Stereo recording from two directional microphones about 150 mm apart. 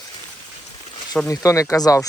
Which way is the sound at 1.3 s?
20° left (ahead or behind).